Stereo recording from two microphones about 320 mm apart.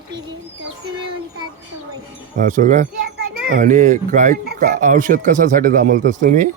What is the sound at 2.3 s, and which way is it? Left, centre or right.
Speech, right.